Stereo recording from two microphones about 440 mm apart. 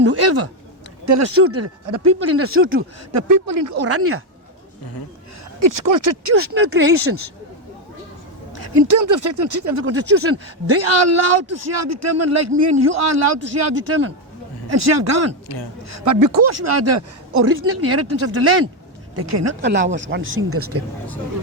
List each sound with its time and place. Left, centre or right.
0.0 s a sound: right
1.0 s speech: right
5.5 s speech: right
6.3 s speech: right
8.6 s speech: right
9.6 s speech: right
19.6 s speech: right